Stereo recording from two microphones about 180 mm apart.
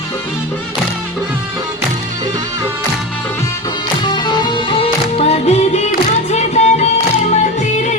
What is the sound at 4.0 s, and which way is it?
Music, 25° left (ahead or behind).